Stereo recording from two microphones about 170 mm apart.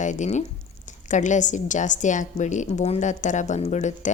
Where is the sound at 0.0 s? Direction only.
45° left (ahead or behind).